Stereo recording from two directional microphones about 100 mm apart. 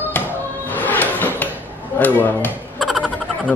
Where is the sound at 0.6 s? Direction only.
15° left (ahead or behind).